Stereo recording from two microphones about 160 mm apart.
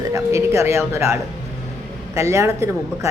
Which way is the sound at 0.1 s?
20° right (ahead or behind).